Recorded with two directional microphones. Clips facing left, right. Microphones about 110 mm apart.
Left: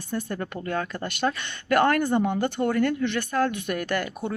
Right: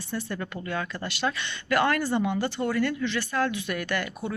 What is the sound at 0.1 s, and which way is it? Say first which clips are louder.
A woman's voice: left 3 dB; 45° left (ahead or behind).